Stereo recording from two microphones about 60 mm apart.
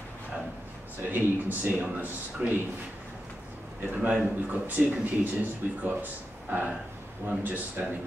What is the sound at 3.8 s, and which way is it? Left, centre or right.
A man's voice, right.